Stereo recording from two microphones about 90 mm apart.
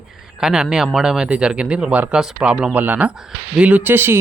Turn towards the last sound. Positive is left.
turn(degrees=-25)  # may be behind; listen again after turning